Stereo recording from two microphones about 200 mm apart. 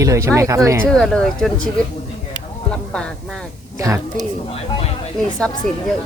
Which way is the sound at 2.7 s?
5° left (ahead or behind).